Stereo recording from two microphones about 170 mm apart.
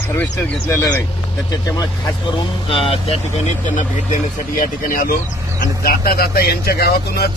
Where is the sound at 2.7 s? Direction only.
35° left (ahead or behind).